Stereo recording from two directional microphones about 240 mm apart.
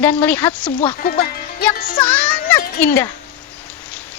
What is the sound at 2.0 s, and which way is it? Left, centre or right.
A child's voice, centre.